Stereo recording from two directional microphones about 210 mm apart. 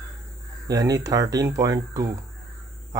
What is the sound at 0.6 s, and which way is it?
Speech, 15° right (ahead or behind).